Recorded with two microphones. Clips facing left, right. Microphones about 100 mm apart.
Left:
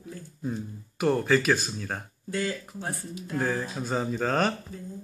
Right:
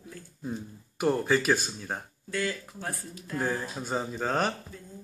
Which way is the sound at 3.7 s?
5° right (ahead or behind).